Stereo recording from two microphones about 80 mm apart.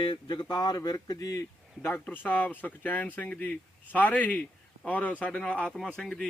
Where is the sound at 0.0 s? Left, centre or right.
Left.